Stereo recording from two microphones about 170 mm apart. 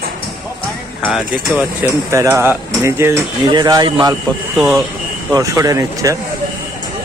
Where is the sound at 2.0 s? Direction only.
15° right (ahead or behind).